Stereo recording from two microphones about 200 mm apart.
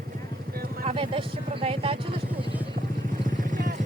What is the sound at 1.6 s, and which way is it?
Speech, 25° right (ahead or behind).